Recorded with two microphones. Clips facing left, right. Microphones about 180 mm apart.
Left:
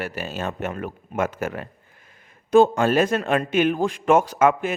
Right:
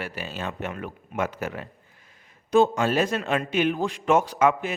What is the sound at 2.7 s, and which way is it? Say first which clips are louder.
A man's voice: left 4 dB; 50° left (ahead or behind).